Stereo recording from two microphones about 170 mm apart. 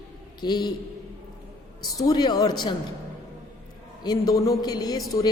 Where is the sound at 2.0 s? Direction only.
25° left (ahead or behind).